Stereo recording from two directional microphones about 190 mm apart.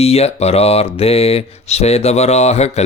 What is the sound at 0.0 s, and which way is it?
Mantra, 30° left (ahead or behind).